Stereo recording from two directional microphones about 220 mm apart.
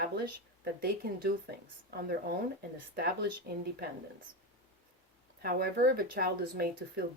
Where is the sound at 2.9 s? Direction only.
45° right (ahead or behind).